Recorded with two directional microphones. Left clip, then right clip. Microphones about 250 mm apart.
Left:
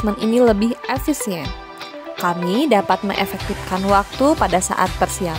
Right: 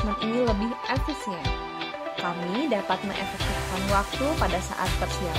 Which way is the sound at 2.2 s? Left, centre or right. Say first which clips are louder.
Left 11 dB; left.